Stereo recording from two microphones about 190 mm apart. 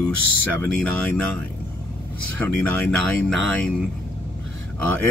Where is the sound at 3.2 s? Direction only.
5° left (ahead or behind).